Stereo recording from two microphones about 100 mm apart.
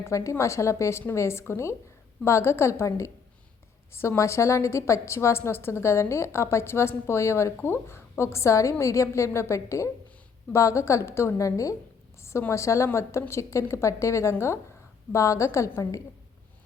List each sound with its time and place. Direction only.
0.0 s a woman's voice: 30° left (ahead or behind)